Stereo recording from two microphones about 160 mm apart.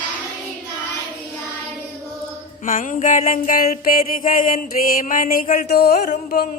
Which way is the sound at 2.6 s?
55° left (ahead or behind).